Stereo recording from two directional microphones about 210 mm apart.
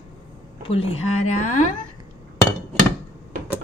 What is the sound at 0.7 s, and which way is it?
Speech, 30° left (ahead or behind).